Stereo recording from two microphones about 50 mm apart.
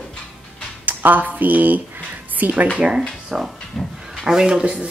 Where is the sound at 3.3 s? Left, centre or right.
Centre.